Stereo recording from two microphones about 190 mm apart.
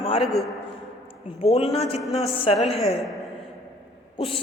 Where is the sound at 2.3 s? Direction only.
30° left (ahead or behind).